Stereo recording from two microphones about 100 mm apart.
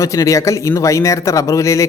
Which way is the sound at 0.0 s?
35° left (ahead or behind).